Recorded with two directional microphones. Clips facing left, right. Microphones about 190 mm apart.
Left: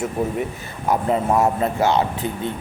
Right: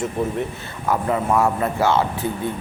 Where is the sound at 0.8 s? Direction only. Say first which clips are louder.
Left 1 dB; 20° left (ahead or behind).